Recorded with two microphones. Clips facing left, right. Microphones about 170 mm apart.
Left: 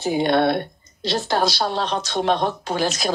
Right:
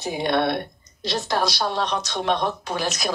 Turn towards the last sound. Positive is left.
turn(degrees=30)  # may be behind; listen again after turning